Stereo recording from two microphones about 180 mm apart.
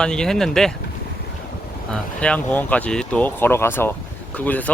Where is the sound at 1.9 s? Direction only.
5° left (ahead or behind).